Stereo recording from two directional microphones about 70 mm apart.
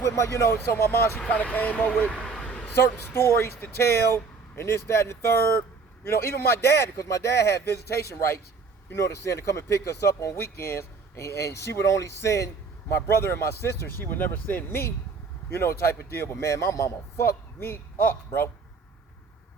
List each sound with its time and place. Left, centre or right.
0.0 s a man's voice: left
1.3 s speech: left
2.1 s a sound: centre
2.7 s a man's voice: left